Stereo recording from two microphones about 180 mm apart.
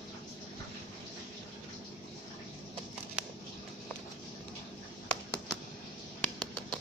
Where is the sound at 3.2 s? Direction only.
5° right (ahead or behind).